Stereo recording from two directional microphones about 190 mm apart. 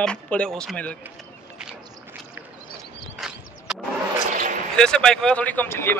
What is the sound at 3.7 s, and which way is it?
Vehicle, 5° right (ahead or behind).